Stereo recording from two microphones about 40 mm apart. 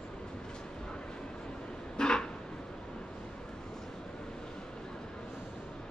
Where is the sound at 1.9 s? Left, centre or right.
Left.